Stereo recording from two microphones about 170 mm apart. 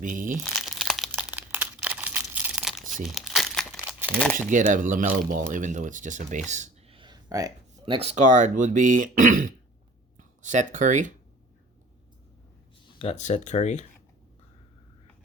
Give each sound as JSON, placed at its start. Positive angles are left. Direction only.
{"t": 0.0, "sound": "speech", "side_deg": -50}
{"t": 0.6, "sound": "crumpling", "side_deg": 0}
{"t": 3.8, "sound": "crumpling", "side_deg": -10}
{"t": 4.4, "sound": "speech", "side_deg": -50}
{"t": 6.5, "sound": "a sound", "side_deg": -45}
{"t": 6.9, "sound": "a sound", "side_deg": -25}
{"t": 7.9, "sound": "speech", "side_deg": -40}
{"t": 12.9, "sound": "speech", "side_deg": 35}